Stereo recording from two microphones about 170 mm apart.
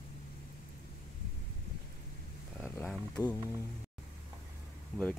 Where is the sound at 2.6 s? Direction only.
10° left (ahead or behind).